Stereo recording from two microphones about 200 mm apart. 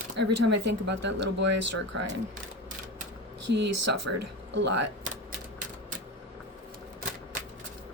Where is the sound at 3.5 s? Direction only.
60° right (ahead or behind).